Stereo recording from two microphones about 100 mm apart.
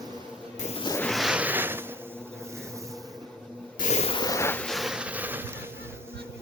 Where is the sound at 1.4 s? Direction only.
20° right (ahead or behind).